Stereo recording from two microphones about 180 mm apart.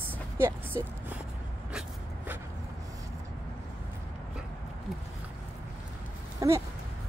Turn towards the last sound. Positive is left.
turn(degrees=-15)  # may be behind; listen again after turning